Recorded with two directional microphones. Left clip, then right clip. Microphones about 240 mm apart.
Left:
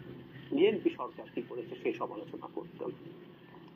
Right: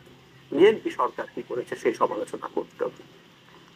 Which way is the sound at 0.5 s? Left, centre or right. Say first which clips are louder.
Right 9 dB; right.